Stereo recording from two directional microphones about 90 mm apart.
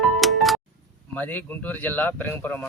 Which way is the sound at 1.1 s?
20° left (ahead or behind).